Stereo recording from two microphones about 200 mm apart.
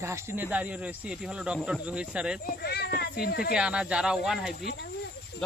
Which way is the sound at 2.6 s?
55° left (ahead or behind).